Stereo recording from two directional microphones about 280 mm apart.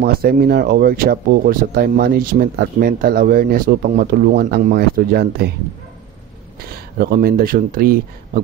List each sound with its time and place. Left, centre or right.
0.0 s speech: right
6.7 s speech: right